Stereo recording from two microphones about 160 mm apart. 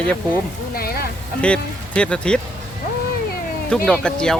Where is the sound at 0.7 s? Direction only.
70° left (ahead or behind).